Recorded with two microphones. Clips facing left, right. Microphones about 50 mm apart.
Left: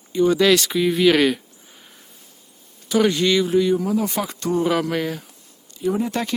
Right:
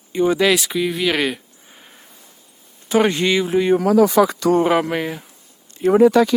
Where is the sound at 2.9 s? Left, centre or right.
Right.